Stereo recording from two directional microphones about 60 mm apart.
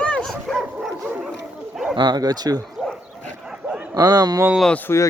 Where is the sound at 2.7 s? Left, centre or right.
Centre.